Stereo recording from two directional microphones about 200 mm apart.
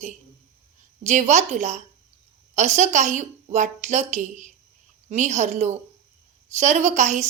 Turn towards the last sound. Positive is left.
turn(degrees=-35)  # may be behind; listen again after turning